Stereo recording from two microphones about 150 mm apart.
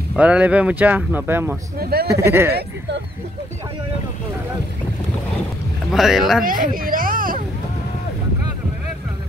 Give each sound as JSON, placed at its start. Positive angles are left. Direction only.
{"t": 0.1, "sound": "speech", "side_deg": -10}
{"t": 1.8, "sound": "speech", "side_deg": -90}
{"t": 2.2, "sound": "speech", "side_deg": -15}
{"t": 5.9, "sound": "speech", "side_deg": -5}
{"t": 6.4, "sound": "speech", "side_deg": -70}